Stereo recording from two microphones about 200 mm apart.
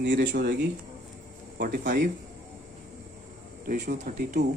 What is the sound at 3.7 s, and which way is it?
Speech, 40° right (ahead or behind).